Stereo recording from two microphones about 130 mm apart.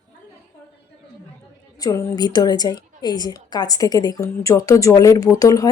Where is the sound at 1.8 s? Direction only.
25° left (ahead or behind).